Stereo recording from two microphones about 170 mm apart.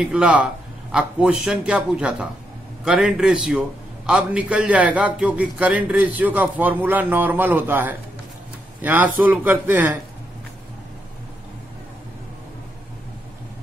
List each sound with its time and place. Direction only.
0.0 s a man's voice: 5° right (ahead or behind)